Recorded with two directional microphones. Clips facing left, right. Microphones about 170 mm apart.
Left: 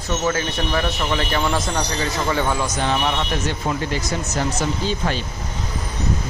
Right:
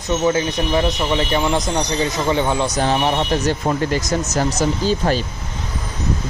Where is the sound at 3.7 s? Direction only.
40° right (ahead or behind).